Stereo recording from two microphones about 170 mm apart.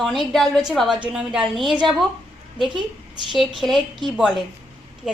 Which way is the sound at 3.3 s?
Centre (ahead or behind).